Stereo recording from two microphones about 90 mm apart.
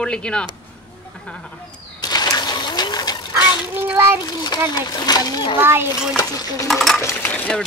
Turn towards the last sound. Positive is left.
turn(degrees=20)  # may be behind; listen again after turning